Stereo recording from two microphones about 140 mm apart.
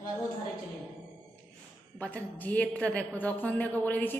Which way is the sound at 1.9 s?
10° left (ahead or behind).